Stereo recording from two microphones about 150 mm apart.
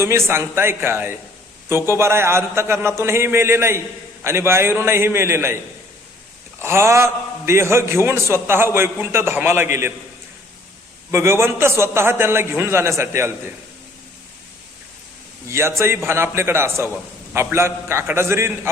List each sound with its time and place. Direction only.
0.0 s a man's voice: 15° right (ahead or behind)
11.1 s a man's voice: 15° right (ahead or behind)
15.4 s a man's voice: 15° right (ahead or behind)